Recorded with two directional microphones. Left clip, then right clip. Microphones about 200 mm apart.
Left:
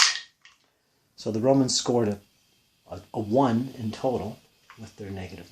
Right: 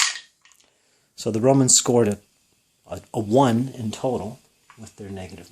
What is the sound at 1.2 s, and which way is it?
Speech, 40° right (ahead or behind).